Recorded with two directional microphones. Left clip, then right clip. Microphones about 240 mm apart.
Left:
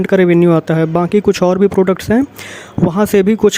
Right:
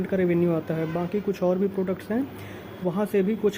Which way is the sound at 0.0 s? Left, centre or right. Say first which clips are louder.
Left 13 dB; left.